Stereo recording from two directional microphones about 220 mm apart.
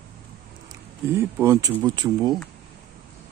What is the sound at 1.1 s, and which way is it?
Speech, 10° right (ahead or behind).